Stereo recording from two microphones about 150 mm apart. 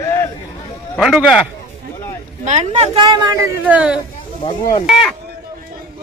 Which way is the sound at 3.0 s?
25° right (ahead or behind).